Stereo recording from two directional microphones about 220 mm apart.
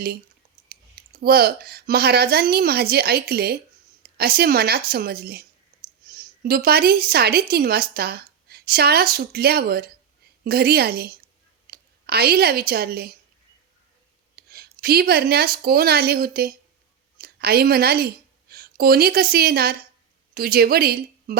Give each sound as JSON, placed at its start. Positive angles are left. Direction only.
{"t": 0.7, "sound": "a woman's voice", "side_deg": -45}
{"t": 14.3, "sound": "a woman's voice", "side_deg": -45}